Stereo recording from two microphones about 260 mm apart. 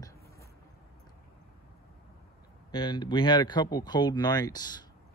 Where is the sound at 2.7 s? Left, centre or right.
Centre.